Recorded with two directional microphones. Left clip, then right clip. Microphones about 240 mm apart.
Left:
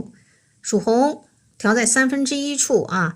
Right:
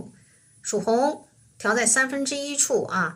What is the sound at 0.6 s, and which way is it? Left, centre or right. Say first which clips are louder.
Speech: left 4 dB; left.